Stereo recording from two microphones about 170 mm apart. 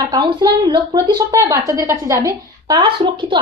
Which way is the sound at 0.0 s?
25° right (ahead or behind).